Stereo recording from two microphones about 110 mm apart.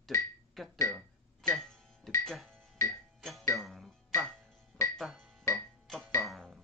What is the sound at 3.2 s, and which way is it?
Music, centre (ahead or behind).